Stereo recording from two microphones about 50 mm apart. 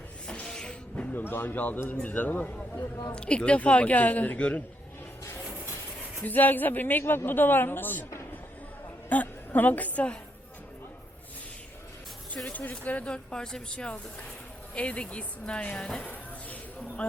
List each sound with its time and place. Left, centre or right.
0.4 s music: centre
1.1 s speech: left
3.2 s speech: left
6.2 s speech: left
7.0 s speech: left
9.0 s a woman's voice: left
12.5 s speech: left
16.0 s a sound: left
17.0 s speech: left